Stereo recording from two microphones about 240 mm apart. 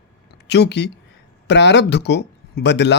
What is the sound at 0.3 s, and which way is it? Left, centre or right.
Speech, left.